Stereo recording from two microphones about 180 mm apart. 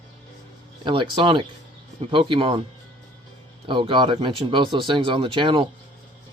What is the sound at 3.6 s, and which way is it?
Speech, 30° right (ahead or behind).